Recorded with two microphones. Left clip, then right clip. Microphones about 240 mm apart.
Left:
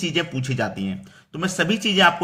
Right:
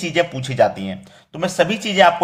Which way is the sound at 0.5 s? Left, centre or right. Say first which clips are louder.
Right 11 dB; centre.